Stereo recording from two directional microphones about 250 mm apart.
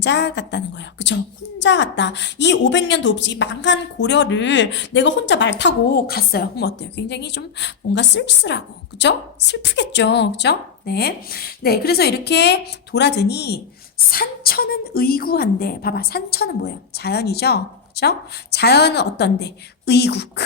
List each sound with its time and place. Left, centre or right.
0.0 s a woman's voice: left